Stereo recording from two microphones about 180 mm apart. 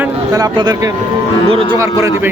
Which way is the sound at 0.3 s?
25° right (ahead or behind).